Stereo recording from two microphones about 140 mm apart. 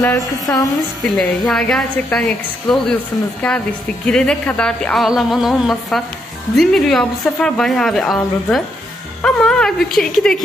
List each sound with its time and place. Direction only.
0.0 s a woman's voice: 20° left (ahead or behind)
1.0 s a woman's voice: 5° left (ahead or behind)